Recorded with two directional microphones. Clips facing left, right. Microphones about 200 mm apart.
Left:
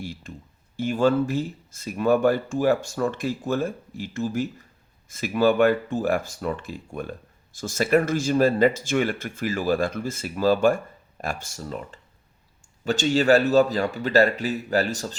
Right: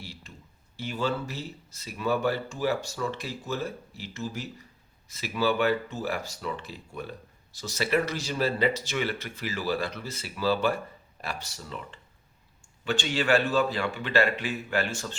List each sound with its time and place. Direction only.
0.0 s clicking: 50° left (ahead or behind)
0.8 s a man's voice: 50° left (ahead or behind)